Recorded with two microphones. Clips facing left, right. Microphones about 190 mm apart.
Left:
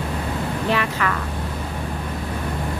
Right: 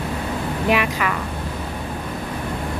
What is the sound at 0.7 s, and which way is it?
Speech, 15° right (ahead or behind).